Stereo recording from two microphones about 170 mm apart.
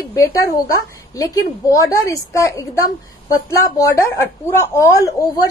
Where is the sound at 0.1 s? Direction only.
20° left (ahead or behind).